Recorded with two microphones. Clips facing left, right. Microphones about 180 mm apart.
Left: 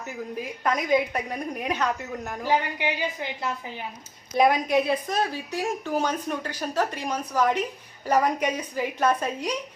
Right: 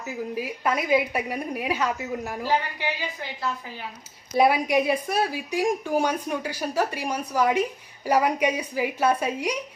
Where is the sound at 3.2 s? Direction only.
20° left (ahead or behind).